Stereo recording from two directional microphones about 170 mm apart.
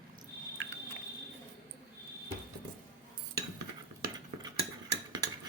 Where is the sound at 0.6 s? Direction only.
90° right.